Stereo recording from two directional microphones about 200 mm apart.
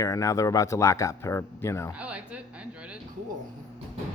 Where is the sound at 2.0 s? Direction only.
5° right (ahead or behind).